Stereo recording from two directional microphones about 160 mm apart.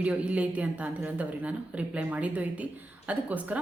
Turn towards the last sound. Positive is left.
turn(degrees=-10)  # may be behind; listen again after turning